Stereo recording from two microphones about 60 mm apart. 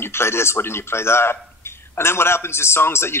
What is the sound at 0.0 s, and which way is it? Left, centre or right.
A man's voice, left.